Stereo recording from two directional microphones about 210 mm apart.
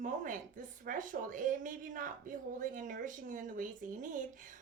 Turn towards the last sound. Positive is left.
turn(degrees=-40)  # may be behind; listen again after turning